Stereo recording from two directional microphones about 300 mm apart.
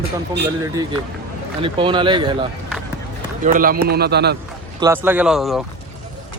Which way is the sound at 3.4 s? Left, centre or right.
Right.